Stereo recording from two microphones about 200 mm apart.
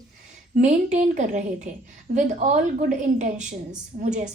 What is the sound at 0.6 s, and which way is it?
A woman's voice, 35° right (ahead or behind).